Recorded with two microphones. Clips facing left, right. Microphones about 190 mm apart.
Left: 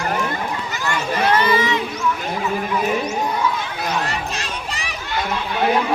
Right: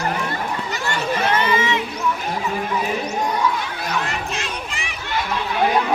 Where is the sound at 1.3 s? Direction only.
35° left (ahead or behind).